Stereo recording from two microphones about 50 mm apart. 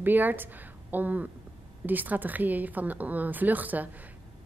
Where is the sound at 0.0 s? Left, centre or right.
Right.